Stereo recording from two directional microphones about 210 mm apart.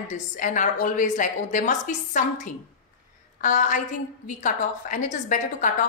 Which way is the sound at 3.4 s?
35° left (ahead or behind).